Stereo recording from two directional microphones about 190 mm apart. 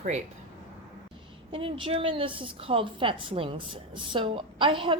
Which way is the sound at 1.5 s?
30° right (ahead or behind).